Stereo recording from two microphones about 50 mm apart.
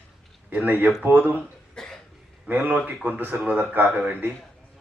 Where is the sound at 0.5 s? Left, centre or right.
Right.